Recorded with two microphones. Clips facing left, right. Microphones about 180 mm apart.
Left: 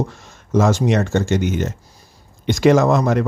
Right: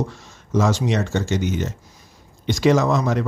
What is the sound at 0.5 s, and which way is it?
Speech, 50° left (ahead or behind).